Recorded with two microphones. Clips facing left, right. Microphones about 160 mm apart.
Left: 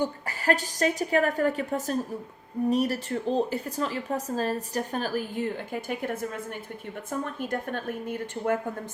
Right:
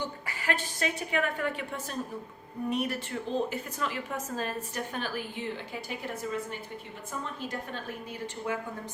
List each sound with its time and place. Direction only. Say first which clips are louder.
0.0 s a woman's voice: left 7 dB; 40° left (ahead or behind)